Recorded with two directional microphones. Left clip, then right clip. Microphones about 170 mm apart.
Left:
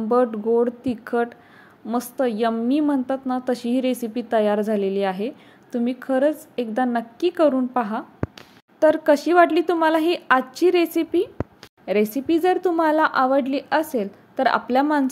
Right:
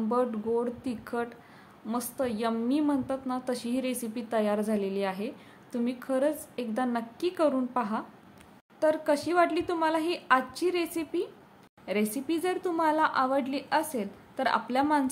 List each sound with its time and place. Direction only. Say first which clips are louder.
0.1 s a woman's voice: left 10 dB; 30° left (ahead or behind)